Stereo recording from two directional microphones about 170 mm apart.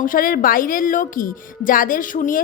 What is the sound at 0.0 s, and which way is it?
A woman's voice, 55° left (ahead or behind).